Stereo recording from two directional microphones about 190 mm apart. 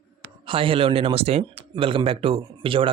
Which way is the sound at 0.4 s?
25° right (ahead or behind).